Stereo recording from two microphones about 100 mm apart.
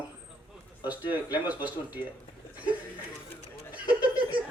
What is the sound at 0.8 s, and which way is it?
A man's voice, 15° right (ahead or behind).